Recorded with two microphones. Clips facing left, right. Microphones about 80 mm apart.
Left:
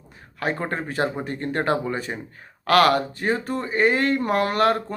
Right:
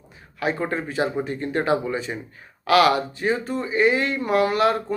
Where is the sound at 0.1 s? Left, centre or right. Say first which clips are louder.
Right 1 dB; left.